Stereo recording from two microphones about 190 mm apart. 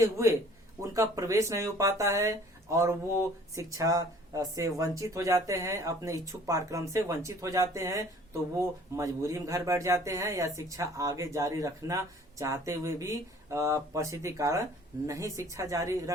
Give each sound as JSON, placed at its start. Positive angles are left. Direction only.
{"t": 0.0, "sound": "speech", "side_deg": -15}